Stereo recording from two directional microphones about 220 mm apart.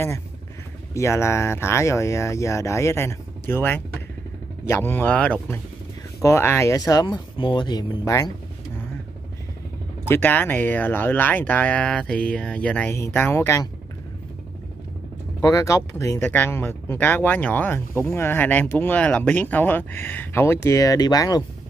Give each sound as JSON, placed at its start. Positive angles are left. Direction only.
{"t": 0.9, "sound": "speech", "side_deg": 10}
{"t": 10.0, "sound": "speech", "side_deg": 10}
{"t": 15.4, "sound": "speech", "side_deg": 15}